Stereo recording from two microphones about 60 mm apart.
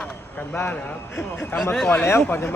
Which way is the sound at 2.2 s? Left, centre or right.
Left.